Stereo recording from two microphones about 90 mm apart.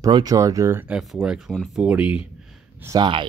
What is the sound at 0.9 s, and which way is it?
Speech, 5° right (ahead or behind).